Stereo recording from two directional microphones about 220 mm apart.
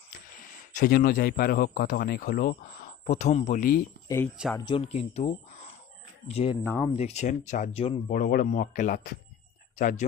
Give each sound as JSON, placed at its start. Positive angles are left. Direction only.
{"t": 0.1, "sound": "speech", "side_deg": 40}
{"t": 4.1, "sound": "speech", "side_deg": 15}
{"t": 6.6, "sound": "speech", "side_deg": 10}
{"t": 6.9, "sound": "speech", "side_deg": 30}
{"t": 8.1, "sound": "speech", "side_deg": 40}